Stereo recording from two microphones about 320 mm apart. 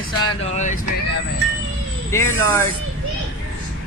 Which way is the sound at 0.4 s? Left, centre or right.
Left.